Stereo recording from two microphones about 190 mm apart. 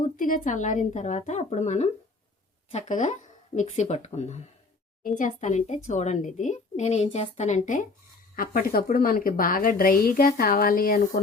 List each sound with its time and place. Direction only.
0.0 s a woman's voice: 45° left (ahead or behind)